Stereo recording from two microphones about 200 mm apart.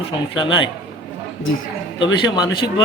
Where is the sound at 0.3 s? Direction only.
20° left (ahead or behind).